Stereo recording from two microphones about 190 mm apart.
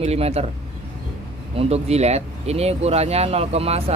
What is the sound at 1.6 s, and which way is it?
Speech, 35° right (ahead or behind).